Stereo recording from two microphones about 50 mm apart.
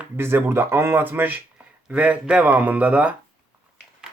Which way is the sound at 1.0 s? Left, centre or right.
Right.